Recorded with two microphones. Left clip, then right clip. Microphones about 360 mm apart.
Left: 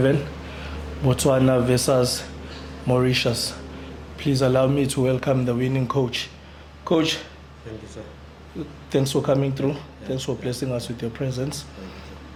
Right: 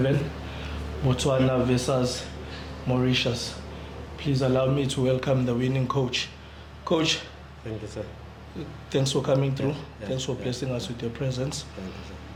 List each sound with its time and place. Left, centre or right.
1.0 s a man's voice: left
8.9 s speech: centre